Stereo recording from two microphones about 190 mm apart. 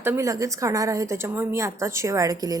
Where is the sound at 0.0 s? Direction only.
15° right (ahead or behind).